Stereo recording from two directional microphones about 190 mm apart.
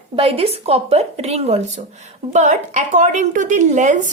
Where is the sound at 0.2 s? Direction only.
30° right (ahead or behind).